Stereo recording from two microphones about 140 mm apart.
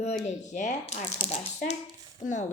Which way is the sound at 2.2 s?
60° left (ahead or behind).